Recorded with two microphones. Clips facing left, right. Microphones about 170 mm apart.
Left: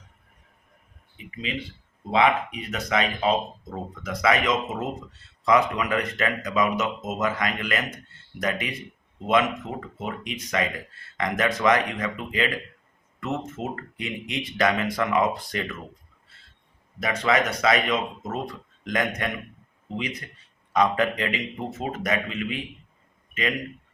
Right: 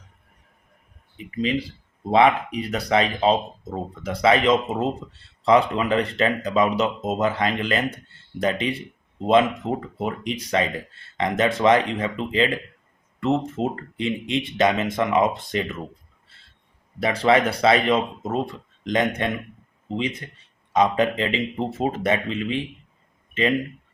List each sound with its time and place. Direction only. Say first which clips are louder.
1.4 s speech: right 9 dB; 35° right (ahead or behind)
16.3 s a sound: even; 30° right (ahead or behind)
17.0 s speech: right 5 dB; 30° right (ahead or behind)